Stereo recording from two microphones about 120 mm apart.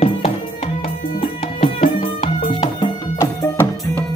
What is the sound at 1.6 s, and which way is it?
Music, 50° left (ahead or behind).